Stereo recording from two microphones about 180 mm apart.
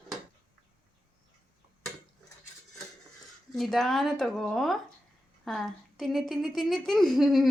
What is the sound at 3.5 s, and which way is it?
A woman's voice, centre (ahead or behind).